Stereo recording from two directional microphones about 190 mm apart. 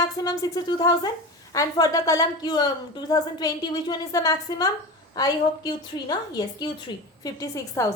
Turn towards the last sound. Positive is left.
turn(degrees=20)  # may be behind; listen again after turning